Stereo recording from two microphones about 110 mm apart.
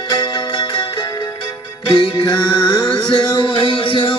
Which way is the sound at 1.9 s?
50° left (ahead or behind).